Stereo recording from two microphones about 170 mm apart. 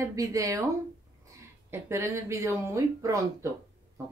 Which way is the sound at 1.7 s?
15° right (ahead or behind).